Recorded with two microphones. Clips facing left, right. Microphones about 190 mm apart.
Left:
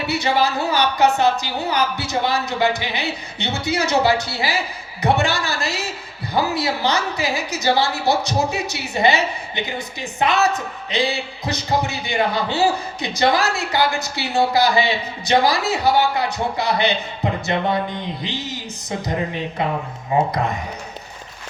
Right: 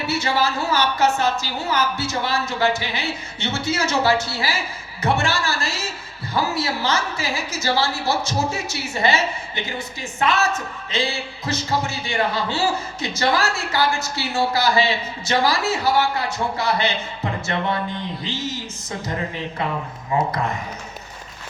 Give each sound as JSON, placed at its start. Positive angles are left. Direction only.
{"t": 0.1, "sound": "a woman's voice", "side_deg": 15}